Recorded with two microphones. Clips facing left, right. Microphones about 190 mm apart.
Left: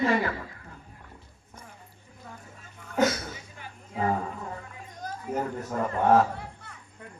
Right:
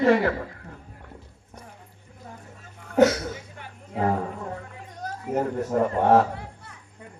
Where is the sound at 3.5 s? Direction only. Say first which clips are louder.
Right 3 dB; 60° right (ahead or behind).